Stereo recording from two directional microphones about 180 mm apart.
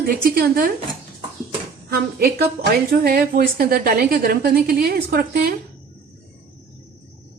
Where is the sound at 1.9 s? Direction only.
60° right (ahead or behind).